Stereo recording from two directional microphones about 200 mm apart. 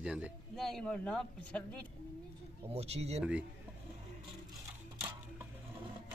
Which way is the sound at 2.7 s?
30° right (ahead or behind).